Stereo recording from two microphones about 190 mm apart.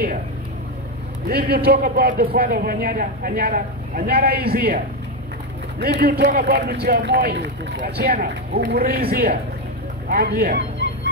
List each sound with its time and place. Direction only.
1.3 s a man's voice: 50° right (ahead or behind)
5.8 s a man's voice: 55° right (ahead or behind)